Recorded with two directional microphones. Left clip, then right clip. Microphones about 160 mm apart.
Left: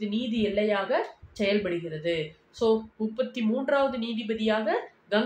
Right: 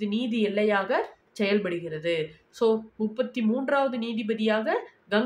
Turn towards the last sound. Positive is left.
turn(degrees=-15)  # may be behind; listen again after turning